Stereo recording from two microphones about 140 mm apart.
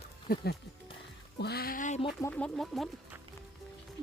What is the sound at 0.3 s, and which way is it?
Speech, 90° left.